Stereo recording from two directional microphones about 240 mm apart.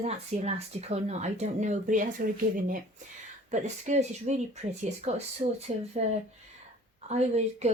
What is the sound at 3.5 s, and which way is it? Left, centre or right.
Speech, right.